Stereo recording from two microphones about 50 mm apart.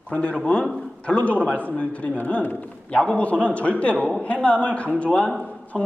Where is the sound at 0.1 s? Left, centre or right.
Left.